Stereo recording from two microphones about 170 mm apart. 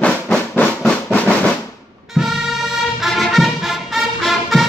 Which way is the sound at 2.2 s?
Centre (ahead or behind).